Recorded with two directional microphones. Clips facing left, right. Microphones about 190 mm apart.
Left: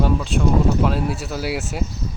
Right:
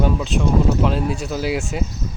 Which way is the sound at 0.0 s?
Centre (ahead or behind).